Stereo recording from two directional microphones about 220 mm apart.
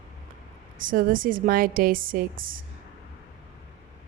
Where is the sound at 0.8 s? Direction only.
40° right (ahead or behind).